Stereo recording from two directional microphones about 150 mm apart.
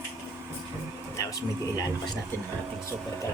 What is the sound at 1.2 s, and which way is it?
Speech, 25° left (ahead or behind).